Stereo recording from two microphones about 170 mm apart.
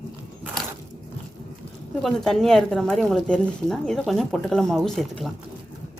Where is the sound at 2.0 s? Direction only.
Centre (ahead or behind).